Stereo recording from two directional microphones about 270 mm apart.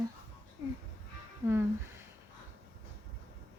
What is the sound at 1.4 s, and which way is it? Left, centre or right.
Speech, centre.